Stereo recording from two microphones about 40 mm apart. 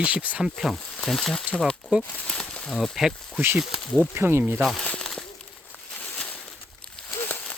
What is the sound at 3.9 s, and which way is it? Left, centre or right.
Speech, right.